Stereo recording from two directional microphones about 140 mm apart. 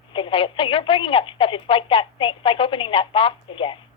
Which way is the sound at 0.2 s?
40° left (ahead or behind).